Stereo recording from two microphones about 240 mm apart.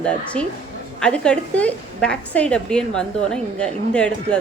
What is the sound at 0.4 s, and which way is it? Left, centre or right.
A woman's voice, centre.